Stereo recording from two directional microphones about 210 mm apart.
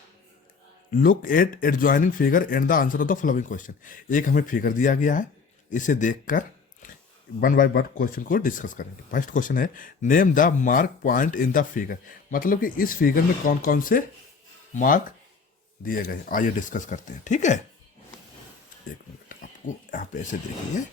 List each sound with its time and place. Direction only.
0.9 s speech: 40° left (ahead or behind)
19.3 s dog: 40° left (ahead or behind)